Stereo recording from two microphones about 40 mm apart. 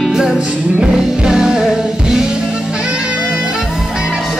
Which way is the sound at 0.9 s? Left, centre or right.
Centre.